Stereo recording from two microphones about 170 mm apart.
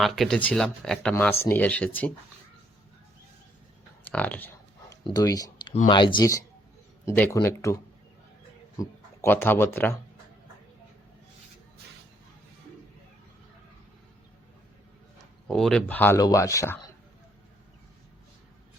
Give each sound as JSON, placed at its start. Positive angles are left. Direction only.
{"t": 0.0, "sound": "speech", "side_deg": 0}
{"t": 1.1, "sound": "speech", "side_deg": 15}
{"t": 4.0, "sound": "a sound", "side_deg": 10}
{"t": 5.0, "sound": "speech", "side_deg": 20}
{"t": 8.8, "sound": "speech", "side_deg": 15}
{"t": 15.4, "sound": "speech", "side_deg": 5}